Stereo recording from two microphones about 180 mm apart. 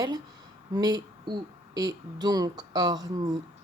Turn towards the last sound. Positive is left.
turn(degrees=-20)  # may be behind; listen again after turning